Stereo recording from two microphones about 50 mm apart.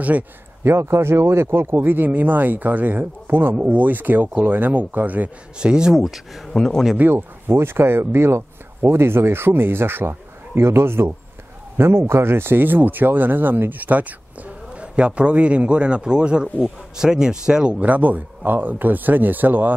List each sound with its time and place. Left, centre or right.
0.7 s speech: right
5.6 s speech: centre
7.1 s speech: right
14.8 s a man's voice: right
17.7 s speech: right